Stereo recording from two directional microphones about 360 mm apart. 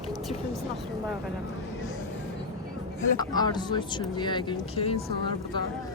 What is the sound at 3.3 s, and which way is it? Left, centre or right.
Speech, centre.